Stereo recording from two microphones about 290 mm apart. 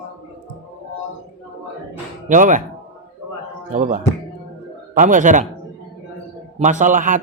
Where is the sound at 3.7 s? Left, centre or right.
Right.